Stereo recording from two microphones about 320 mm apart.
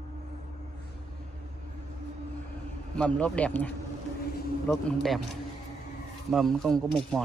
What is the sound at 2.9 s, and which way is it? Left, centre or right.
Speech, centre.